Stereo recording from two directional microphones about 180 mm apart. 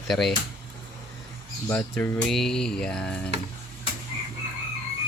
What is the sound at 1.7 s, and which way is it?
Speech, 10° left (ahead or behind).